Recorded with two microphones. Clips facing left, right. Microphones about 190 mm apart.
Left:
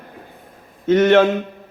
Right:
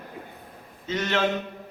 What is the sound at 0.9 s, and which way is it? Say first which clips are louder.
Speech: left 13 dB; 55° left (ahead or behind).